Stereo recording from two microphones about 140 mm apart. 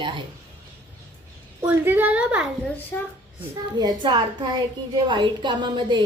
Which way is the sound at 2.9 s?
15° left (ahead or behind).